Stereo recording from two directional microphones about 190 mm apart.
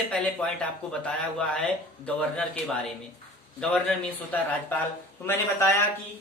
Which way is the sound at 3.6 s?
5° left (ahead or behind).